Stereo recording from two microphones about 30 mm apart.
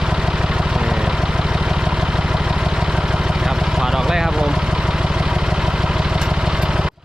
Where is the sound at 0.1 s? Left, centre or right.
Right.